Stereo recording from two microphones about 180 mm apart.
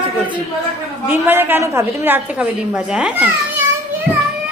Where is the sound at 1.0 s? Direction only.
10° right (ahead or behind).